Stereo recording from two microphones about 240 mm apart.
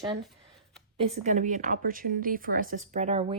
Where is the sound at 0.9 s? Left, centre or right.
Right.